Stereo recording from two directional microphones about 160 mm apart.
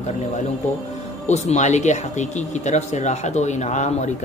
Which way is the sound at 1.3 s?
45° left (ahead or behind).